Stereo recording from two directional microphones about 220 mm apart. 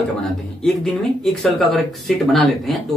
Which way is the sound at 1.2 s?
Centre (ahead or behind).